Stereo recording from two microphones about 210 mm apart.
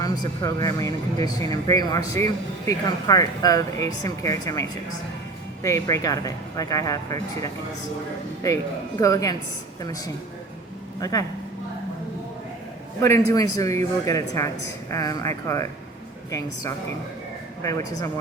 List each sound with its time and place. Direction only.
0.0 s speech: 15° left (ahead or behind)
5.6 s speech: 15° left (ahead or behind)
9.0 s speech: 15° left (ahead or behind)
13.0 s speech: 15° left (ahead or behind)
17.6 s speech: 15° left (ahead or behind)